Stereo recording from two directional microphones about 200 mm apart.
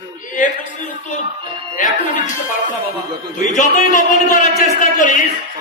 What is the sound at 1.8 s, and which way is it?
Speech, 40° left (ahead or behind).